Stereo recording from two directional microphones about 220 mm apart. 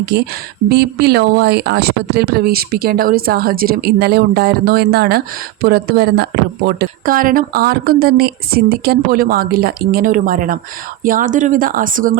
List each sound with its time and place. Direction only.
0.1 s speech: 50° right (ahead or behind)